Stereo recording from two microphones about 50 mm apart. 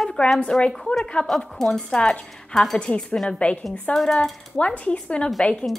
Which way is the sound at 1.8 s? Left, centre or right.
Left.